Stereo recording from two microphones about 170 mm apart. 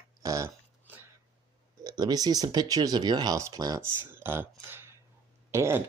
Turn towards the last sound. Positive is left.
turn(degrees=-15)  # may be behind; listen again after turning